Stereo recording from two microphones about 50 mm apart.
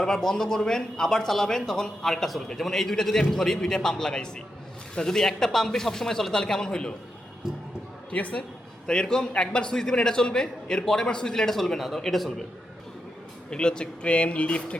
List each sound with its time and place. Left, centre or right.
0.0 s a man's voice: centre
7.4 s a sound: centre
8.1 s speech: left
8.9 s a man's voice: centre
13.5 s speech: centre